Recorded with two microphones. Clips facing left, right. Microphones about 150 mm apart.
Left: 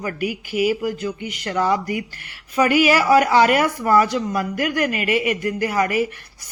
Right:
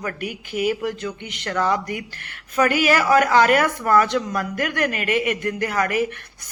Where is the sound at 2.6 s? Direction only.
45° right (ahead or behind).